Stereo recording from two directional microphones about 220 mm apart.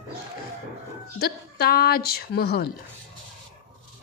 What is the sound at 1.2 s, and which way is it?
A woman's voice, 45° left (ahead or behind).